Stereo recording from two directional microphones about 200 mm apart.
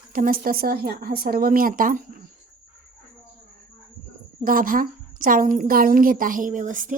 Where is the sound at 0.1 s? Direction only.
45° right (ahead or behind).